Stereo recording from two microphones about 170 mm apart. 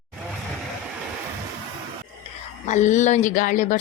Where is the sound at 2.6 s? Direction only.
45° left (ahead or behind).